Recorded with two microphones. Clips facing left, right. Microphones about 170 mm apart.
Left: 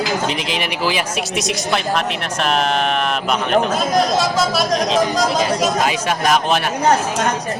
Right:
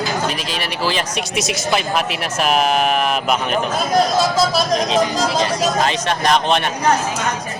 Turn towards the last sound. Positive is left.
turn(degrees=5)  # may be behind; listen again after turning